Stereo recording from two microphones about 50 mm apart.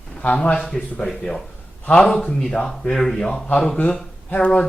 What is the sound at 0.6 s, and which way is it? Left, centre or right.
A man's voice, centre.